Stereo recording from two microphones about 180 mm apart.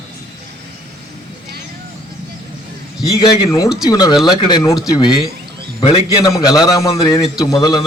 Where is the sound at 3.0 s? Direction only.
20° left (ahead or behind).